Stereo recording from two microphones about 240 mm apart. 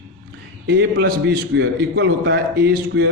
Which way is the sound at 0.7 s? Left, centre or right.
Right.